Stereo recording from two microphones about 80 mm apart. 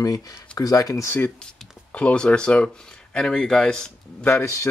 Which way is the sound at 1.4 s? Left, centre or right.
Centre.